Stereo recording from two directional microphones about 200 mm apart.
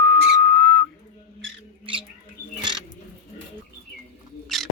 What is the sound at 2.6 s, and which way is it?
Bird, 25° right (ahead or behind).